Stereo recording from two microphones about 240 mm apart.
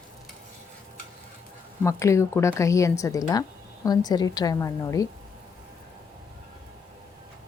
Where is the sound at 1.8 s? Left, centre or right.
Centre.